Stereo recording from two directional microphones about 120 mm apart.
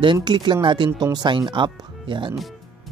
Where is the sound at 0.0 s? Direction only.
40° right (ahead or behind).